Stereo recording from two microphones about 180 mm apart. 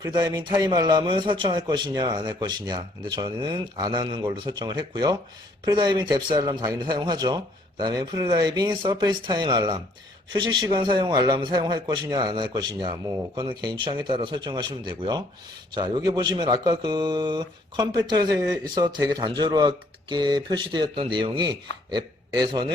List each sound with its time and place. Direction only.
0.0 s a man's voice: 20° right (ahead or behind)